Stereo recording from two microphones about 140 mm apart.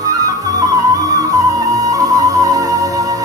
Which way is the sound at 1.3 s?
25° right (ahead or behind).